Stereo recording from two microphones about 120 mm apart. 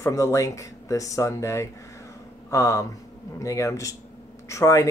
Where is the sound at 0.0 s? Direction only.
25° left (ahead or behind).